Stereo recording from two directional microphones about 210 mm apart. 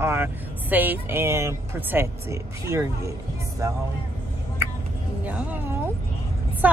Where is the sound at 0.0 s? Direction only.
10° right (ahead or behind).